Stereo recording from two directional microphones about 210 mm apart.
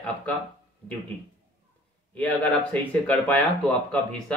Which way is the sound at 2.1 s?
5° left (ahead or behind).